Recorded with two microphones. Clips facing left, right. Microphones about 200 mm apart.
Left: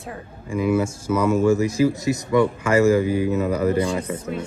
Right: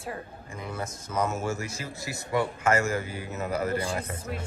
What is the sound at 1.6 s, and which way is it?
Speech, 15° left (ahead or behind).